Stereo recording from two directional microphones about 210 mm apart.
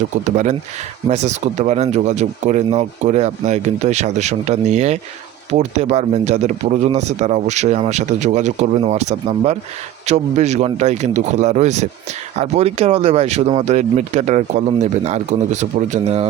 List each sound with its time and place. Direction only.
0.3 s a man's voice: 35° right (ahead or behind)